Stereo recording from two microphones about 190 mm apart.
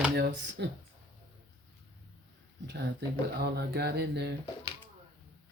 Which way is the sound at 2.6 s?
65° right (ahead or behind).